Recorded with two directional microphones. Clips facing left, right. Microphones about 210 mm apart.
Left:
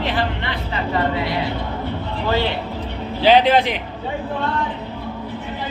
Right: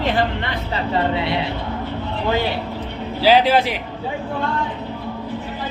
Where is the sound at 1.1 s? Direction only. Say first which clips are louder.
Right 1 dB; 25° right (ahead or behind).